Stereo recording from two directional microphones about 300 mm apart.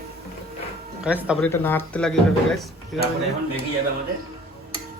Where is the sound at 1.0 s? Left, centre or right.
Centre.